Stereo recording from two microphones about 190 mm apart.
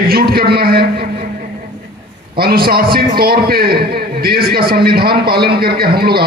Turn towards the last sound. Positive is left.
turn(degrees=-55)  # may be behind; listen again after turning